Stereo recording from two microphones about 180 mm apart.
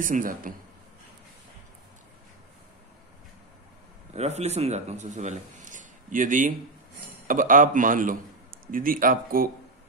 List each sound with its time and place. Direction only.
0.0 s a man's voice: 50° right (ahead or behind)
4.1 s a man's voice: 35° right (ahead or behind)